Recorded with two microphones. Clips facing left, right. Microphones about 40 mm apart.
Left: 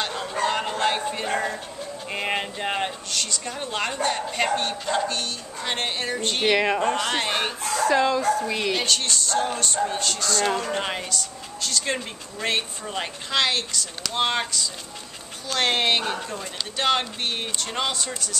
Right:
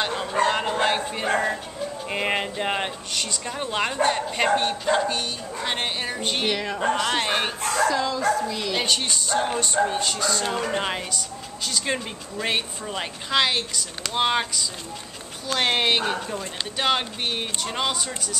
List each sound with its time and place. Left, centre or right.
0.0 s bow-wow: centre
2.0 s speech: centre
7.9 s speech: left
8.7 s speech: centre